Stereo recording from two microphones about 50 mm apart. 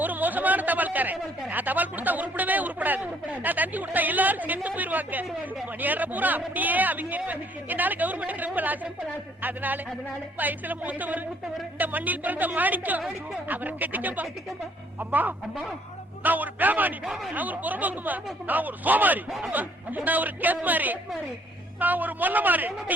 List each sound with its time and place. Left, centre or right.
0.0 s speech: right